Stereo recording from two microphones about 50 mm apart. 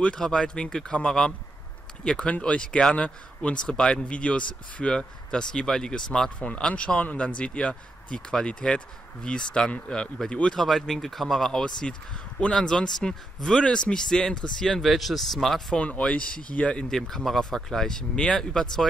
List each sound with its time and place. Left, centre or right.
0.1 s speech: centre
2.0 s speech: left
6.4 s speech: left
10.6 s speech: centre
15.7 s speech: left
16.9 s speech: centre